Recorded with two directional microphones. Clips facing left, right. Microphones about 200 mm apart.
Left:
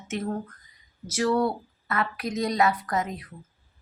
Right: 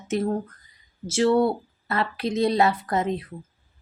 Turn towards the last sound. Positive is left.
turn(degrees=-30)  # may be behind; listen again after turning